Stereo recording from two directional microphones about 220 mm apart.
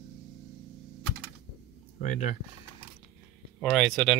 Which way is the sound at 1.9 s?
35° left (ahead or behind).